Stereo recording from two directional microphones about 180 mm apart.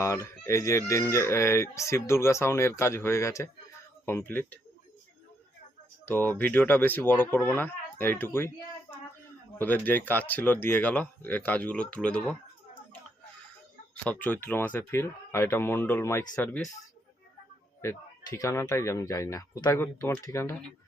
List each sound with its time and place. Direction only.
0.0 s speech: 15° left (ahead or behind)
6.1 s speech: 10° left (ahead or behind)
14.0 s speech: 10° left (ahead or behind)
17.8 s speech: 20° left (ahead or behind)